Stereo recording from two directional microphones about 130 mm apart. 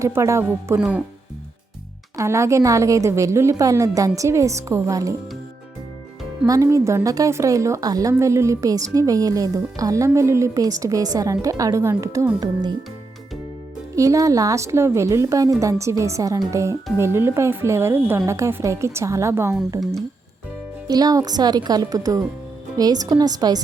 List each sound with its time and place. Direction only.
0.0 s a woman's voice: 20° right (ahead or behind)
0.8 s speech: 10° right (ahead or behind)
2.1 s a woman's voice: 20° right (ahead or behind)
6.4 s a woman's voice: 25° right (ahead or behind)
13.9 s a woman's voice: 25° right (ahead or behind)
20.8 s speech: 30° right (ahead or behind)